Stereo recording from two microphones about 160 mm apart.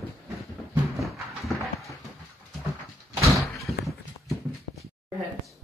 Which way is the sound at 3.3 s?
Centre (ahead or behind).